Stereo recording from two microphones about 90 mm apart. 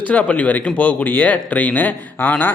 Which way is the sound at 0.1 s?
15° left (ahead or behind).